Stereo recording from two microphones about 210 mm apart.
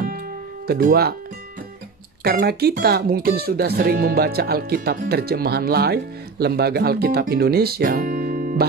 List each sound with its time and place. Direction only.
0.7 s speech: 45° right (ahead or behind)
2.2 s speech: 50° right (ahead or behind)